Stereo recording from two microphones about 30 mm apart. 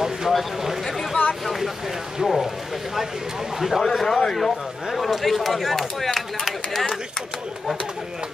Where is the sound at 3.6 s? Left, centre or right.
Centre.